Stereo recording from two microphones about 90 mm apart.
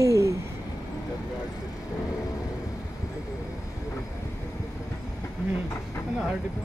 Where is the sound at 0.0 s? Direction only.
35° right (ahead or behind).